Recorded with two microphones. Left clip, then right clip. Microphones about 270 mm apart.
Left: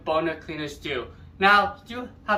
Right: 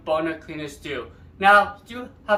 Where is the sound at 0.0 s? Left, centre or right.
Centre.